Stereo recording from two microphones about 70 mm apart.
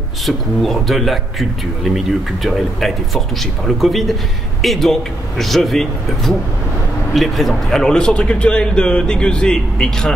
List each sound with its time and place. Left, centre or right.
0.6 s a man's voice: centre